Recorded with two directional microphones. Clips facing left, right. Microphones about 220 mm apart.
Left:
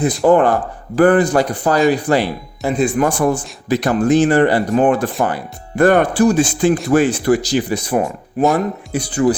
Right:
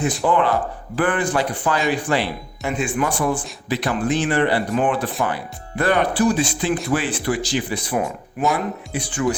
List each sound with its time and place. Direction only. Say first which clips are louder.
0.0 s speech: left 7 dB; 35° left (ahead or behind)